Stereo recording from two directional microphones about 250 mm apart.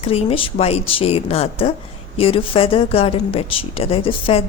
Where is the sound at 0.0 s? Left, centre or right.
Left.